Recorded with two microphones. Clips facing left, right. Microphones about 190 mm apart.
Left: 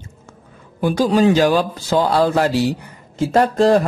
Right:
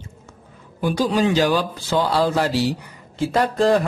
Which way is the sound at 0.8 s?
45° left (ahead or behind).